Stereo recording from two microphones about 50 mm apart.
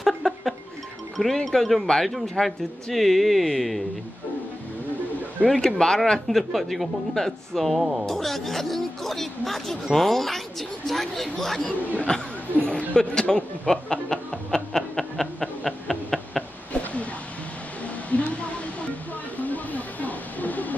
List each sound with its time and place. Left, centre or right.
0.0 s a sound: centre
1.1 s speech: centre
5.5 s speech: centre
6.2 s speech: centre
12.1 s speech: left
12.9 s music: centre
18.1 s a sound: left